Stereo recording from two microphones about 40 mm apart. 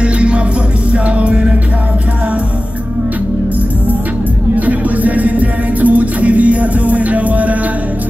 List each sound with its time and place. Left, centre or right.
0.0 s music: right
4.6 s music: right